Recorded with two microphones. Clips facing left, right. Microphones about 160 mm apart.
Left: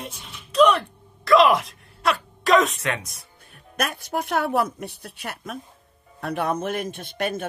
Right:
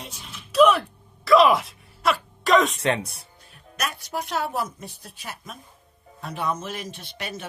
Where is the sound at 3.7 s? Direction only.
55° left (ahead or behind).